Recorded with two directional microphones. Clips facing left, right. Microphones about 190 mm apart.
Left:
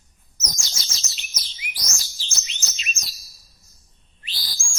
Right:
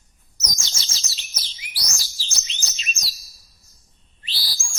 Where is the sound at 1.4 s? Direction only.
35° right (ahead or behind).